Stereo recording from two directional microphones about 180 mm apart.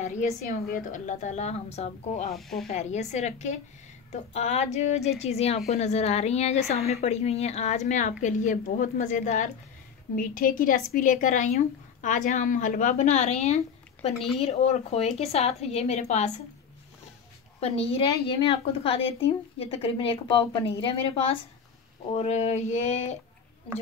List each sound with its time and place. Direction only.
0.0 s speech: 45° left (ahead or behind)
2.3 s speech: centre (ahead or behind)
2.7 s a woman's voice: 40° left (ahead or behind)
14.1 s speech: centre (ahead or behind)
14.4 s a woman's voice: 35° left (ahead or behind)
17.6 s a woman's voice: 35° left (ahead or behind)